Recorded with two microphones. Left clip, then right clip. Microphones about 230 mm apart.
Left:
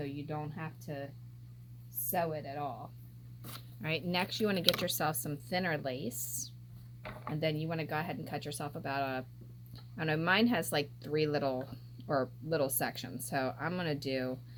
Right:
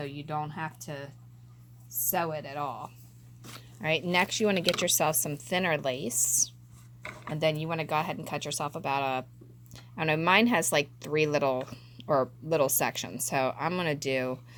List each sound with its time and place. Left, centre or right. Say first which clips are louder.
0.0 s speech: right 6 dB; right
3.8 s speech: right 8 dB; right
7.3 s speech: right 7 dB; right